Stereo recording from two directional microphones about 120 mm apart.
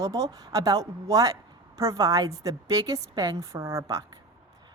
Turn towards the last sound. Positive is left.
turn(degrees=-25)  # may be behind; listen again after turning